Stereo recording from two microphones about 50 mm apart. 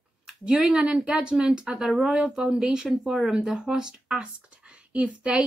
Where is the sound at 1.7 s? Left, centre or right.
Centre; by 5.4 s right.